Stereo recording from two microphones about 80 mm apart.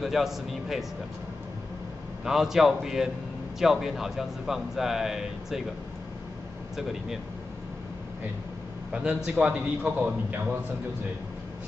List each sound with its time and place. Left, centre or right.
0.0 s a man's voice: centre
2.2 s a man's voice: centre
8.9 s a man's voice: centre